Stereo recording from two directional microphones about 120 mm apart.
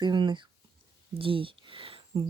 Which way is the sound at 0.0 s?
40° right (ahead or behind).